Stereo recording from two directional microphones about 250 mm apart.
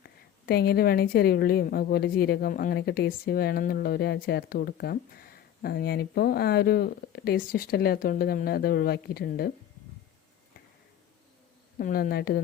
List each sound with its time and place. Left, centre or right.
0.0 s a woman's voice: left
11.8 s a woman's voice: left